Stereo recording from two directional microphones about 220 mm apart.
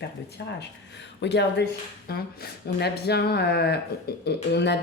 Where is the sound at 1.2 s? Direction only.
50° left (ahead or behind).